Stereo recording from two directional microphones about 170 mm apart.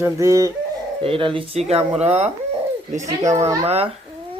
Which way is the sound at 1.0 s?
30° right (ahead or behind).